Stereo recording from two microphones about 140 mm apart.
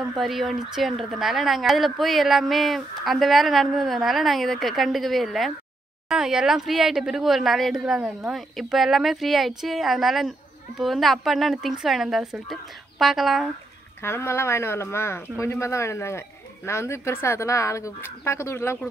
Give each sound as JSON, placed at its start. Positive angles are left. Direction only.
{"t": 0.2, "sound": "speech", "side_deg": 0}
{"t": 14.0, "sound": "speech", "side_deg": 15}